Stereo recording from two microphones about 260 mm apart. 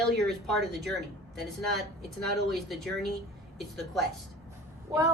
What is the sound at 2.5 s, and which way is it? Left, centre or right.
Speech, centre.